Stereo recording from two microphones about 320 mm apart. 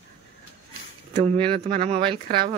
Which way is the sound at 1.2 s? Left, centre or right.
Centre.